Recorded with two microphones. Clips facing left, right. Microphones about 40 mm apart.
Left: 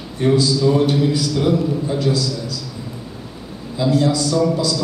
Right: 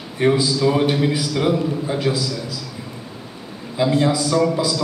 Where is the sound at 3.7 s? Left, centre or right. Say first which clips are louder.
Even; right.